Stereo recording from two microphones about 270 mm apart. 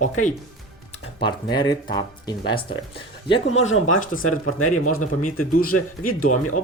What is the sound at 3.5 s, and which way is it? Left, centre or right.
Speech, left.